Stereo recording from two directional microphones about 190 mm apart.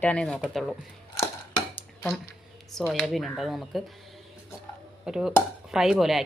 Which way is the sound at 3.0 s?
Centre (ahead or behind).